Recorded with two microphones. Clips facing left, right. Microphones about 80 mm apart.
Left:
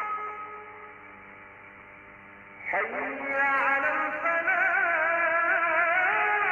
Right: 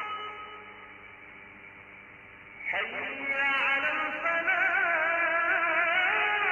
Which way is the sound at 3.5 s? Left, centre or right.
Left.